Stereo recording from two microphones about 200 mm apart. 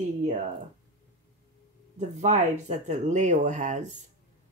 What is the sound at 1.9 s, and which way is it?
Speech, 35° right (ahead or behind).